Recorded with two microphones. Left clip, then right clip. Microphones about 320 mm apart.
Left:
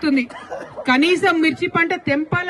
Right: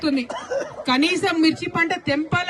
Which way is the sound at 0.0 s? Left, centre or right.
Left.